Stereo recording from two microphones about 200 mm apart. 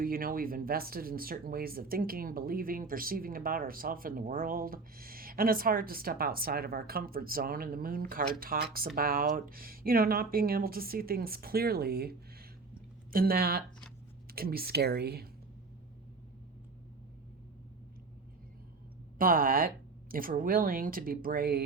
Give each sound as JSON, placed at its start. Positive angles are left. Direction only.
{"t": 0.0, "sound": "speech", "side_deg": -45}
{"t": 19.2, "sound": "speech", "side_deg": -45}